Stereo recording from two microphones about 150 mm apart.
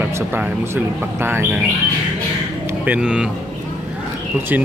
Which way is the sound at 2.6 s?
10° right (ahead or behind).